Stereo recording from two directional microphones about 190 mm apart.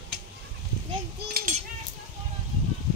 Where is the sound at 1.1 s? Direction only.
50° right (ahead or behind).